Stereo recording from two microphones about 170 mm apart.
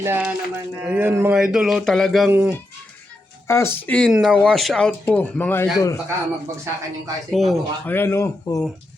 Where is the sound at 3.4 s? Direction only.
15° left (ahead or behind).